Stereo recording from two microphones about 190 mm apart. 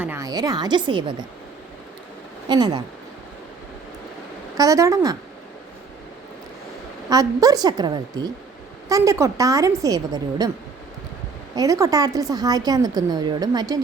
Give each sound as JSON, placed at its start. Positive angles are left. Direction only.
{"t": 0.0, "sound": "a woman's voice", "side_deg": -15}
{"t": 2.5, "sound": "a woman's voice", "side_deg": -20}
{"t": 4.5, "sound": "a woman's voice", "side_deg": -15}
{"t": 7.1, "sound": "a woman's voice", "side_deg": -20}
{"t": 11.5, "sound": "a woman's voice", "side_deg": -15}